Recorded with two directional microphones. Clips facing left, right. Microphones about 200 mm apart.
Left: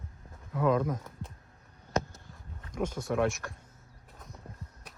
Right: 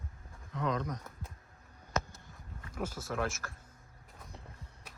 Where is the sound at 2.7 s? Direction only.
5° right (ahead or behind).